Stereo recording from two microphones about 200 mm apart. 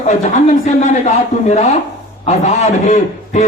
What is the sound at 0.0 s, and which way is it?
A man's voice, 35° left (ahead or behind).